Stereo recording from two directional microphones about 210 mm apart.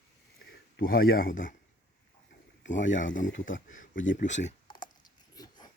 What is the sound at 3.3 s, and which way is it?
Speech, 65° left (ahead or behind).